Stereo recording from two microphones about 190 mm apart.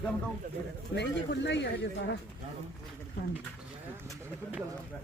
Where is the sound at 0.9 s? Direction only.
65° left (ahead or behind).